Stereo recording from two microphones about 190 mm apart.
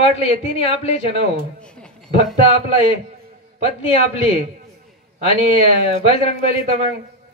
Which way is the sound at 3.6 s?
30° left (ahead or behind).